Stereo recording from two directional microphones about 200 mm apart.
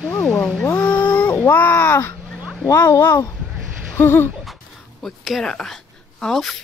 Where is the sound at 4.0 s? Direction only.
10° left (ahead or behind).